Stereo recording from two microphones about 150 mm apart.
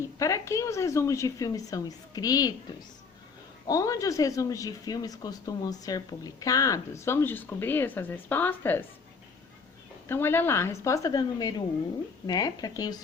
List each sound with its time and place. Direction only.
0.0 s speech: 20° left (ahead or behind)
3.7 s speech: 20° left (ahead or behind)
10.1 s speech: 15° left (ahead or behind)